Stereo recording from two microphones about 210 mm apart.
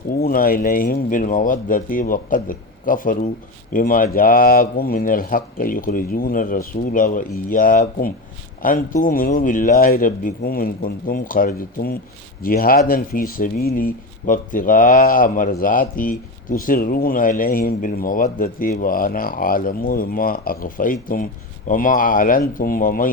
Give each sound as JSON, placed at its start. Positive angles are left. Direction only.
{"t": 0.2, "sound": "speech", "side_deg": 45}